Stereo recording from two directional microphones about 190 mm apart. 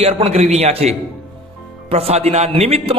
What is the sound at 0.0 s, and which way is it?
A man's voice, 30° right (ahead or behind).